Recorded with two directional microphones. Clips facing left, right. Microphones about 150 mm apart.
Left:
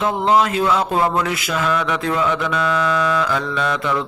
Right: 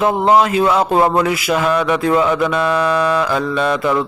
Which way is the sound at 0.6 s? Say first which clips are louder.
Right 4 dB; 25° right (ahead or behind).